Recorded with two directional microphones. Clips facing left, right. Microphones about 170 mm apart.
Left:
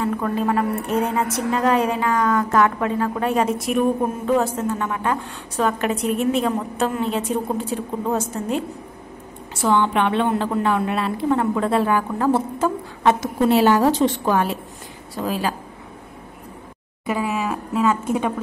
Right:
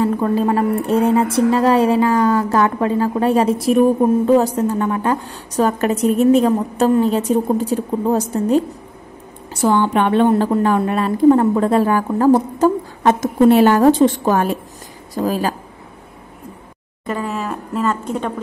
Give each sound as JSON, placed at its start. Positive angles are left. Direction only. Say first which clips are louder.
{"t": 0.0, "sound": "a woman's voice", "louder": "right 5 dB", "side_deg": -30}
{"t": 17.0, "sound": "a woman's voice", "louder": "even", "side_deg": 5}